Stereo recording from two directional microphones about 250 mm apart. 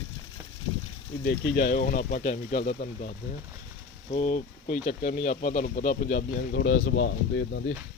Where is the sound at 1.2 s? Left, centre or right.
Left.